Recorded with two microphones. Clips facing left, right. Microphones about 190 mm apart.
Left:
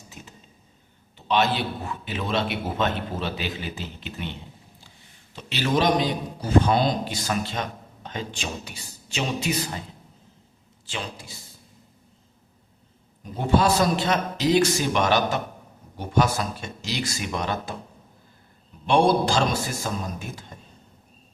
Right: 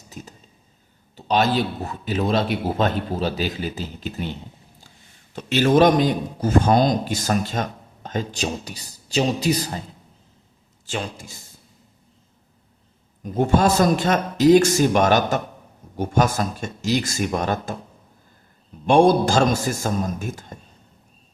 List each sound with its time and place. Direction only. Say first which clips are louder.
1.1 s a man's voice: right 3 dB; 40° right (ahead or behind)
10.8 s a man's voice: right 5 dB; 45° right (ahead or behind)
13.3 s a man's voice: right 3 dB; 45° right (ahead or behind)
18.9 s a man's voice: right 4 dB; 45° right (ahead or behind)